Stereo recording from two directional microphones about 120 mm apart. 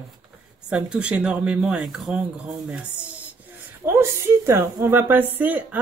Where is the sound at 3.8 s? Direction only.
25° right (ahead or behind).